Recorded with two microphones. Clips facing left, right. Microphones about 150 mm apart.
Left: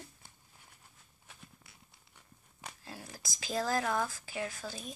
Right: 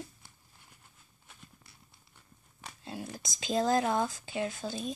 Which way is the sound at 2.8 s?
20° right (ahead or behind).